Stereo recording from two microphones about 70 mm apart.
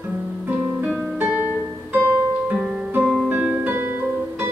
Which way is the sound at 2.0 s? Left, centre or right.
Right.